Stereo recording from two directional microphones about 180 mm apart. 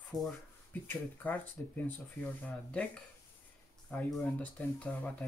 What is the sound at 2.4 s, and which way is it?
Speech, 5° left (ahead or behind).